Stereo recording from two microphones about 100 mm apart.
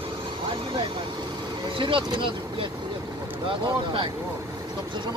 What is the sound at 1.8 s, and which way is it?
Speech, 60° right (ahead or behind).